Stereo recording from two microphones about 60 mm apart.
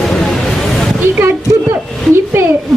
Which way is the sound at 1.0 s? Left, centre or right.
Right.